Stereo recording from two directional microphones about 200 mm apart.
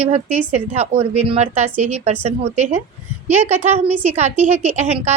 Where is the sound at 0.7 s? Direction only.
30° right (ahead or behind).